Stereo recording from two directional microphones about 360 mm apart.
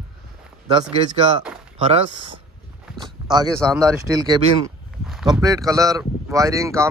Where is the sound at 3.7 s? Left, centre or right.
Centre.